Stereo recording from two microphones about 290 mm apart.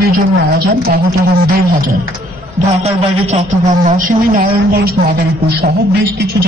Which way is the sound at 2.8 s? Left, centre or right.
Right.